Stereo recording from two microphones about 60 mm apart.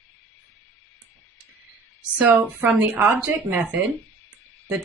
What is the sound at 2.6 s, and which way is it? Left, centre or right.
A woman's voice, right.